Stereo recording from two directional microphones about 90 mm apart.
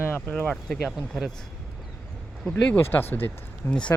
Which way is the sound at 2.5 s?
15° left (ahead or behind).